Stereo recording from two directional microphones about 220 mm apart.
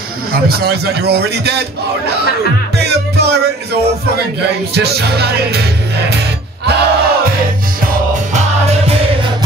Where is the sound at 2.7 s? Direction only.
50° right (ahead or behind).